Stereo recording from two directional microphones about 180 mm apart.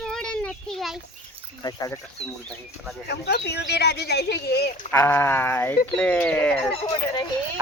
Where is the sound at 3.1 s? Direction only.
70° left (ahead or behind).